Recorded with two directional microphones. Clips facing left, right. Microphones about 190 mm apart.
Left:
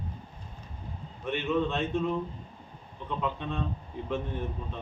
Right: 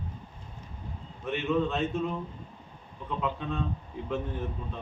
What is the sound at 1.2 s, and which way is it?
A man's voice, centre (ahead or behind).